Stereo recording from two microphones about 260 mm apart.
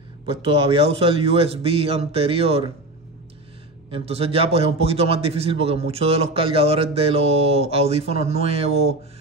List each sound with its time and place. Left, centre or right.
0.5 s a man's voice: right
3.9 s a man's voice: right